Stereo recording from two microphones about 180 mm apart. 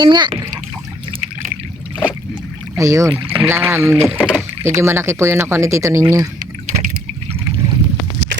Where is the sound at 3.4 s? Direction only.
15° right (ahead or behind).